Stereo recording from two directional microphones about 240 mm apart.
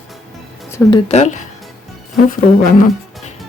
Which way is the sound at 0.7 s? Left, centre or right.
Centre.